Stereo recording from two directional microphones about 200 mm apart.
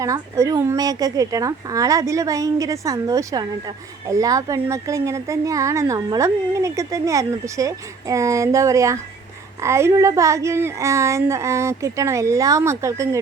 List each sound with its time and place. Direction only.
0.0 s speech: 15° right (ahead or behind)